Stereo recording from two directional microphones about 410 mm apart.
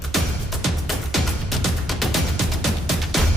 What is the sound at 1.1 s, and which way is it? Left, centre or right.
Music, centre.